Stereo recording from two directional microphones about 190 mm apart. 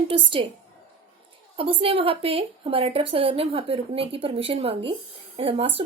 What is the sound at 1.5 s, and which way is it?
A woman's voice, 30° right (ahead or behind).